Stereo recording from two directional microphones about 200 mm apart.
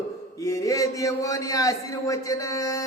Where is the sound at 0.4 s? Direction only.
15° left (ahead or behind).